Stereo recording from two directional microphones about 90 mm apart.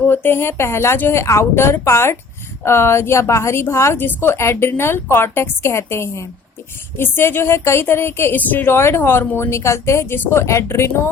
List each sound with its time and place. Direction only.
0.1 s speech: 25° left (ahead or behind)